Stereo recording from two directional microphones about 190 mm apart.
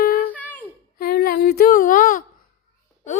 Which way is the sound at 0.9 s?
50° left (ahead or behind).